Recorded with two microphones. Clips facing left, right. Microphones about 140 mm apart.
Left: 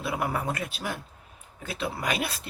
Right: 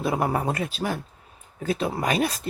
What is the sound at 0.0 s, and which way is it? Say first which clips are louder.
Speech: right 5 dB; 40° right (ahead or behind).